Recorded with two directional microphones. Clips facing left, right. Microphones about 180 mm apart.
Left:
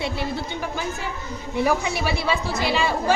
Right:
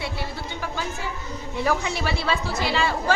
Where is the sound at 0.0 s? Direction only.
20° left (ahead or behind).